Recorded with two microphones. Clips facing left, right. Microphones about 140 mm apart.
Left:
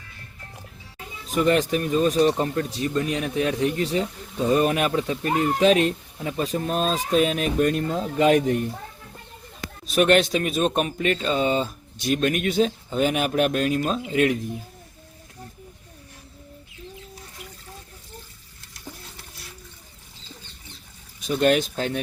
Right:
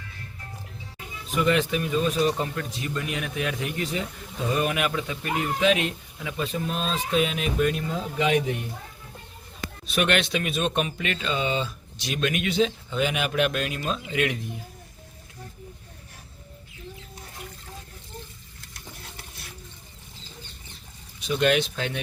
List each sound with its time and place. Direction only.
1.3 s speech: 40° left (ahead or behind)
9.8 s speech: 40° left (ahead or behind)
21.2 s speech: 40° left (ahead or behind)